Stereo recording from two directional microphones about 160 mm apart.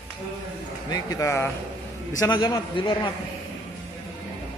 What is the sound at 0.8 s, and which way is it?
A man's voice, 20° left (ahead or behind).